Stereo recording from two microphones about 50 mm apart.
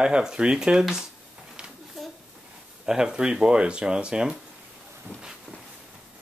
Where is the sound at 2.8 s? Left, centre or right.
Centre.